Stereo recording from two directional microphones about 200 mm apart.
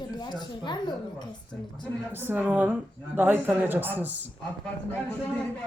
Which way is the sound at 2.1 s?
10° right (ahead or behind).